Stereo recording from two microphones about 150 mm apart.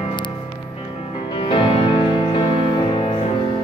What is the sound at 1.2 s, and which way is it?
Music, 35° left (ahead or behind).